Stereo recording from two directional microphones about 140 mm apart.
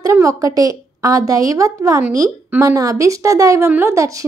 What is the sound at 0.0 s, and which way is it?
A woman's voice, 25° right (ahead or behind).